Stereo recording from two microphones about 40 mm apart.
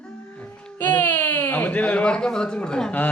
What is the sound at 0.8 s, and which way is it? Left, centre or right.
Baby cry, left.